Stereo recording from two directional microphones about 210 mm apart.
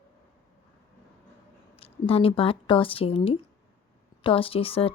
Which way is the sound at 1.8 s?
25° left (ahead or behind).